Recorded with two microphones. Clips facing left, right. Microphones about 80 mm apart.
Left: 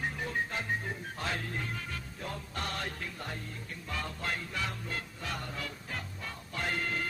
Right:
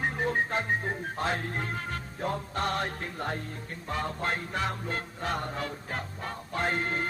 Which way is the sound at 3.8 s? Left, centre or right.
Right.